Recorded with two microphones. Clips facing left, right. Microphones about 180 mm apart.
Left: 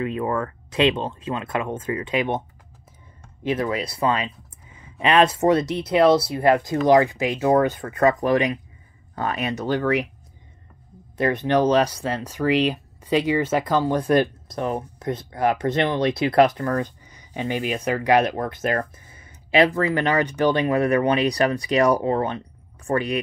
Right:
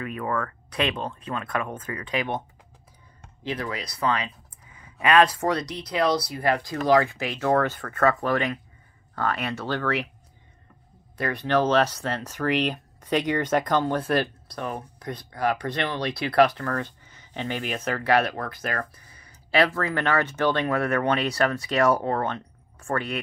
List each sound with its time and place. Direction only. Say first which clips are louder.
0.0 s speech: left 4 dB; 25° left (ahead or behind)
3.4 s speech: left 7 dB; 25° left (ahead or behind)
11.1 s speech: left 4 dB; 20° left (ahead or behind)